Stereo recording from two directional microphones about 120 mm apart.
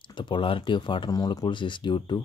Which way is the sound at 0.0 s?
45° left (ahead or behind).